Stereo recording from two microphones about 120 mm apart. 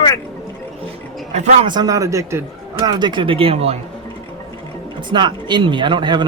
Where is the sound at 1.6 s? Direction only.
35° right (ahead or behind); by 3.8 s 60° right (ahead or behind).